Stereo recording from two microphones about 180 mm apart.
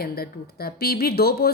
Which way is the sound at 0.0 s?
55° left (ahead or behind).